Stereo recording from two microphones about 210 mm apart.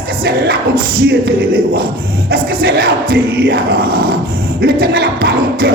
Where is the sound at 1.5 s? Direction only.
45° right (ahead or behind).